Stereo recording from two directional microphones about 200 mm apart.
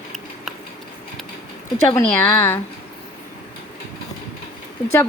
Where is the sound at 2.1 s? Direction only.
10° left (ahead or behind).